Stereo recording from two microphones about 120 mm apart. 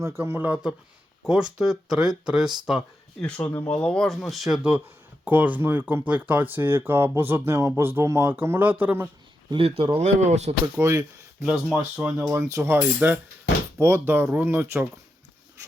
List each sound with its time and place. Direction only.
0.0 s speech: 20° right (ahead or behind); by 2.5 s 5° right (ahead or behind)
3.2 s speech: 10° left (ahead or behind); by 9.0 s 15° right (ahead or behind)
9.5 s speech: 50° right (ahead or behind)
10.0 s speech: 70° right (ahead or behind)
10.8 s speech: 25° right (ahead or behind)
11.4 s speech: 5° right (ahead or behind)
12.3 s speech: 25° right (ahead or behind)